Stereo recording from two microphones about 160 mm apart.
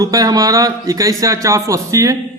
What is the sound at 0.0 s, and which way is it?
A man's voice, 20° right (ahead or behind).